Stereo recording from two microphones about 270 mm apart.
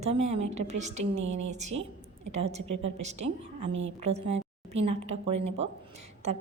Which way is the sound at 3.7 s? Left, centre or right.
Right.